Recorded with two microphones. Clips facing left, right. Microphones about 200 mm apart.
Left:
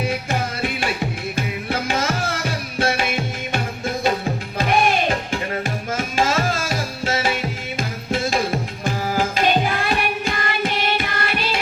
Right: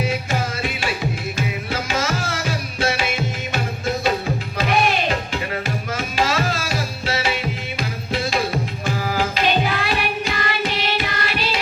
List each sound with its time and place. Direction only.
0.3 s music: 55° left (ahead or behind)
4.5 s music: 50° left (ahead or behind)